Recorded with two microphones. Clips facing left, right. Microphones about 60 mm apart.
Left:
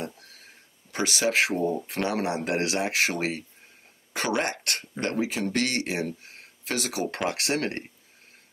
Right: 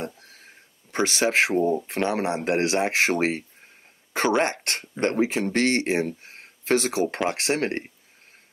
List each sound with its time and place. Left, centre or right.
0.9 s speech: right